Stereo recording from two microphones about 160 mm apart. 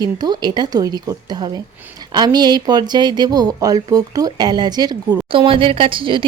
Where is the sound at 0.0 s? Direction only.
25° right (ahead or behind).